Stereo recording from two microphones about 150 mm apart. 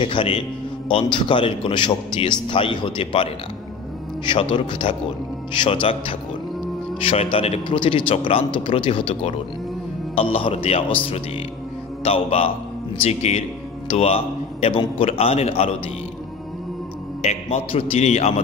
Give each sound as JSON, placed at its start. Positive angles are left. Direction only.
{"t": 0.0, "sound": "a man's voice", "side_deg": 35}
{"t": 4.3, "sound": "a man's voice", "side_deg": 35}
{"t": 12.0, "sound": "mantra", "side_deg": 40}
{"t": 12.9, "sound": "speech", "side_deg": 45}
{"t": 17.2, "sound": "a man's voice", "side_deg": 45}